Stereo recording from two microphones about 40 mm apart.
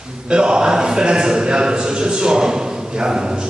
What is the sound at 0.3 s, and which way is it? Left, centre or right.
A man's voice, right.